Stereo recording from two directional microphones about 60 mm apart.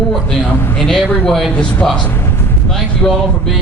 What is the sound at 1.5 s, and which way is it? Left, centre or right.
Speech, left.